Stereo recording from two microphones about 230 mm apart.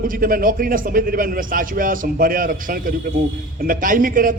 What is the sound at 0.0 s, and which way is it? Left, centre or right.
A man's voice, right.